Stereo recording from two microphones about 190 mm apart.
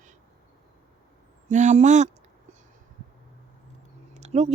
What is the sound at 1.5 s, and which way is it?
Speech, 40° right (ahead or behind).